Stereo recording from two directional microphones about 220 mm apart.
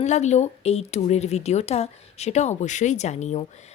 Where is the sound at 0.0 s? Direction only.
30° left (ahead or behind).